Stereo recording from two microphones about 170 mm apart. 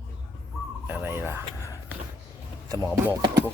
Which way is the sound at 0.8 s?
10° right (ahead or behind).